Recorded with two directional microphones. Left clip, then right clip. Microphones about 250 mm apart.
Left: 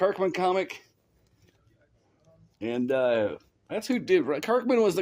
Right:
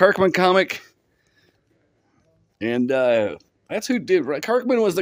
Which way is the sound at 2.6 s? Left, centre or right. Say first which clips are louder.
Right 6 dB; right.